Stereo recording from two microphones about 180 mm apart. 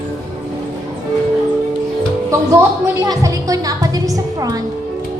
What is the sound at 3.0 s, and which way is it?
Music, 20° right (ahead or behind).